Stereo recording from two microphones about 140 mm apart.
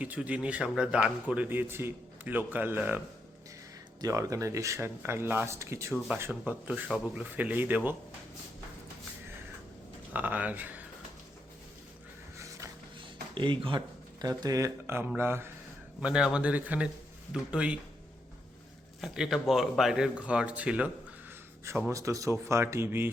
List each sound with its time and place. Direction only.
0.0 s speech: 10° right (ahead or behind)
4.0 s speech: 25° right (ahead or behind)
10.1 s speech: 10° right (ahead or behind)
12.4 s music: 20° right (ahead or behind)
13.0 s speech: 35° right (ahead or behind); by 15.4 s 15° right (ahead or behind)
16.0 s speech: 5° right (ahead or behind)
19.0 s speech: 5° right (ahead or behind)
21.8 s speech: 20° right (ahead or behind)